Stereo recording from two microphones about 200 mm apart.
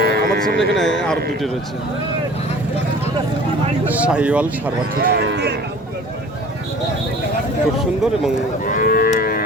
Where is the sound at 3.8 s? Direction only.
5° right (ahead or behind).